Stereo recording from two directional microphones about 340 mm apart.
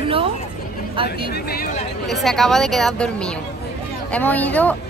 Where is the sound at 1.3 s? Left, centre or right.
Left.